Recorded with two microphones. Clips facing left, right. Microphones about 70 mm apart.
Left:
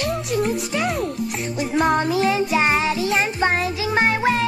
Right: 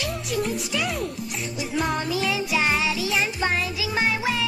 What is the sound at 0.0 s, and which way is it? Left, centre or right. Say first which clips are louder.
Music: left 5 dB; left.